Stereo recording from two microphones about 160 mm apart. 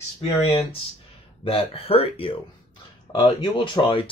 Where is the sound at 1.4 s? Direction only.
35° left (ahead or behind).